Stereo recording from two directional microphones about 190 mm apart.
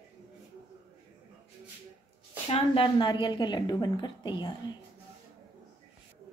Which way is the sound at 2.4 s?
30° left (ahead or behind).